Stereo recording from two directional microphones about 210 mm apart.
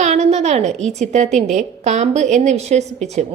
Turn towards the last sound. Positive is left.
turn(degrees=-30)  # may be behind; listen again after turning